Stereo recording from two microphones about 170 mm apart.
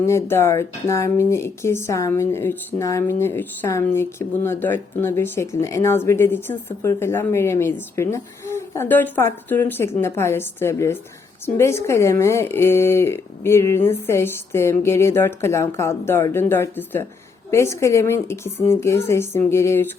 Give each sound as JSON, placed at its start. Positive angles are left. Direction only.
{"t": 0.0, "sound": "speech", "side_deg": 15}